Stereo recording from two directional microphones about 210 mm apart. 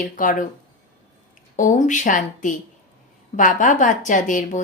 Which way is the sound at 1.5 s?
35° left (ahead or behind).